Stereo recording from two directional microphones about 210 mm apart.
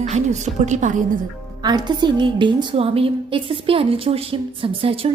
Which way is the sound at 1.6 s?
20° right (ahead or behind).